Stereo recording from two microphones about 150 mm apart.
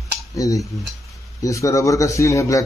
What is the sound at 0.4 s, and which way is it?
Speech, 20° left (ahead or behind).